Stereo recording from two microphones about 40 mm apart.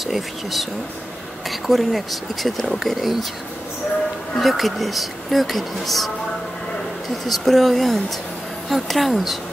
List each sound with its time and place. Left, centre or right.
0.0 s speech: centre
4.4 s speech: centre
7.2 s speech: centre